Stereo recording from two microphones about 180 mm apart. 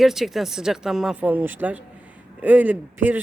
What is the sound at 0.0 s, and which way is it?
A woman's voice, centre (ahead or behind).